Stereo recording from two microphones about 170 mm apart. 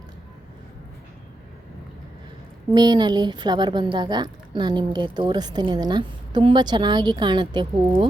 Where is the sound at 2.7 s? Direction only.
25° right (ahead or behind).